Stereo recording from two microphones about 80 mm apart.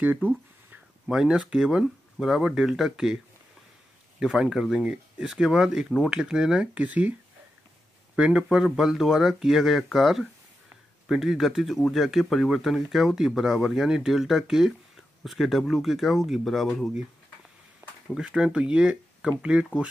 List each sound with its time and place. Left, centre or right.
0.0 s speech: right
1.0 s speech: centre
4.2 s speech: centre
8.2 s speech: centre
18.1 s speech: centre